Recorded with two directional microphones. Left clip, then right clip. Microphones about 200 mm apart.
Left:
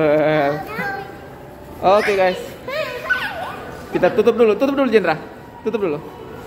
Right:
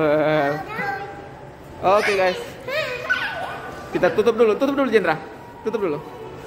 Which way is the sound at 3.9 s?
Centre (ahead or behind).